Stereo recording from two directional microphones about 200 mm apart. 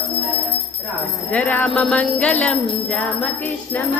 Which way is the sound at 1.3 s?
10° left (ahead or behind).